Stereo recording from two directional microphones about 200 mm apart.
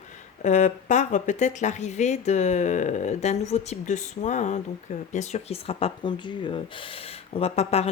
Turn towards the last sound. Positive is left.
turn(degrees=30)  # may be behind; listen again after turning